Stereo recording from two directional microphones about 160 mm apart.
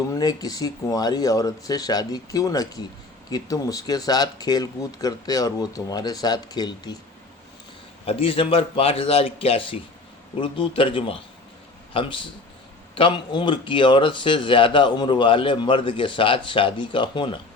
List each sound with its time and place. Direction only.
0.1 s speech: 25° left (ahead or behind)
8.0 s speech: 35° left (ahead or behind)